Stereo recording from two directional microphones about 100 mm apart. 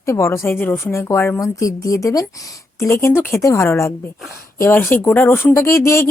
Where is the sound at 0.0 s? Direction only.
30° left (ahead or behind).